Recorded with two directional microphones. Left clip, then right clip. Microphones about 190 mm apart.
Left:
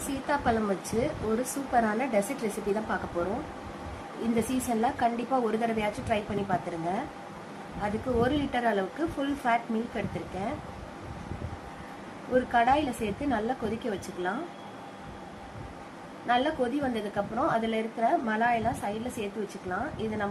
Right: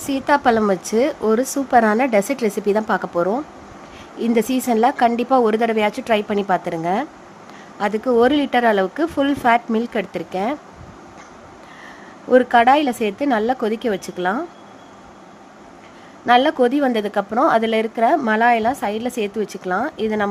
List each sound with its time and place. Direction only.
0.1 s a woman's voice: 60° right (ahead or behind)
4.4 s a woman's voice: 60° right (ahead or behind)
12.3 s a woman's voice: 65° right (ahead or behind)
16.2 s a woman's voice: 65° right (ahead or behind)